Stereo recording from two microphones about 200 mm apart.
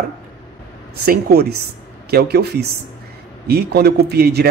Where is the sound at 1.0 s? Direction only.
50° right (ahead or behind).